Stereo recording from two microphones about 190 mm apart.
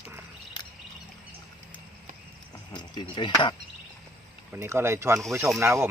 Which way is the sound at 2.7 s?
25° left (ahead or behind).